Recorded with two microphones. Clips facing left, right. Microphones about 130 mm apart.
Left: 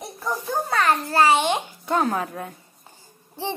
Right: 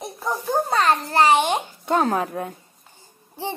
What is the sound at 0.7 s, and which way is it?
Speech, 20° right (ahead or behind).